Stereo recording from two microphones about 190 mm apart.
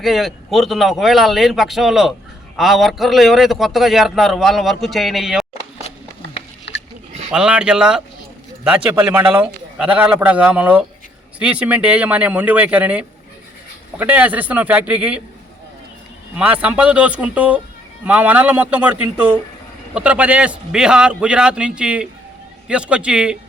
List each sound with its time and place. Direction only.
0.0 s a man's voice: centre (ahead or behind)
6.7 s pig: 65° left (ahead or behind)
7.3 s a man's voice: 5° right (ahead or behind)
16.4 s a man's voice: 10° right (ahead or behind)